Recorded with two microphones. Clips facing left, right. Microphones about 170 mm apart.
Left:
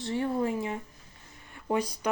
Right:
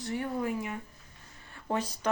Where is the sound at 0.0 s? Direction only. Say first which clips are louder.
Left 4 dB; 25° left (ahead or behind).